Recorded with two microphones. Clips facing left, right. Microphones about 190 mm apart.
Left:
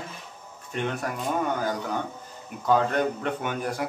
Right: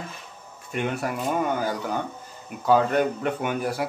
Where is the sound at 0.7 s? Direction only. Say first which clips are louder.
Right 2 dB; 10° right (ahead or behind).